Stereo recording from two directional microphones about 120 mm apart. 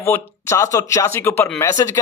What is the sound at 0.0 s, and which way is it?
Speech, 25° left (ahead or behind).